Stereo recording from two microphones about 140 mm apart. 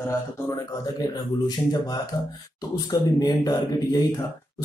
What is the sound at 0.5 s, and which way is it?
Speech, 30° left (ahead or behind).